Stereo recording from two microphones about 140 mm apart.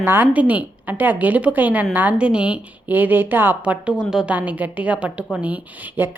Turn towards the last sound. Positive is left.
turn(degrees=-15)  # may be behind; listen again after turning